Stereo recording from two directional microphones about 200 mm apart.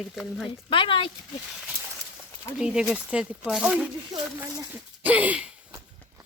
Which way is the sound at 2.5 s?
5° right (ahead or behind).